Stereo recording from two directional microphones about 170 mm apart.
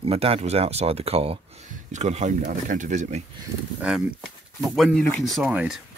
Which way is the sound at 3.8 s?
5° right (ahead or behind).